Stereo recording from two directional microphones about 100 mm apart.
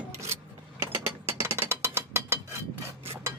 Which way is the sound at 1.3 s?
25° right (ahead or behind).